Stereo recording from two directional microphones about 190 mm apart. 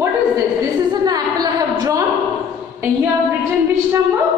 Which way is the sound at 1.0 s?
20° right (ahead or behind).